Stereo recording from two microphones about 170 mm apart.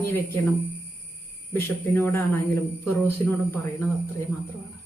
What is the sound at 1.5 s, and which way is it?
Speech, 15° left (ahead or behind).